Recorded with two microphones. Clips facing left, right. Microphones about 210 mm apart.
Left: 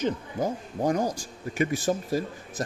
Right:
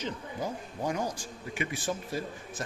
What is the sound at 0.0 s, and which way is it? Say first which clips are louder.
Speech: left 7 dB; 45° left (ahead or behind).